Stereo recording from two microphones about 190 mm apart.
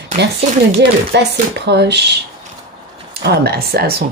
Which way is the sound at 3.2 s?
55° right (ahead or behind).